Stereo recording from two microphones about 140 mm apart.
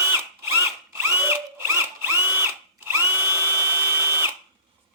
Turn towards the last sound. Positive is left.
turn(degrees=-15)  # may be behind; listen again after turning